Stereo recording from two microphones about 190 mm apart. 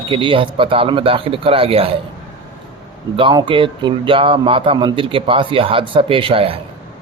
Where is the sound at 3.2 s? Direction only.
25° right (ahead or behind).